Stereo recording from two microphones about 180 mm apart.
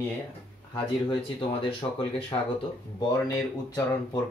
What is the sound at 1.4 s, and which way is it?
Speech, 30° left (ahead or behind).